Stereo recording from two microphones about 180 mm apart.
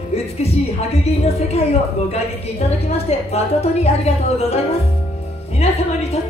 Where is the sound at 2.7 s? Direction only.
35° left (ahead or behind).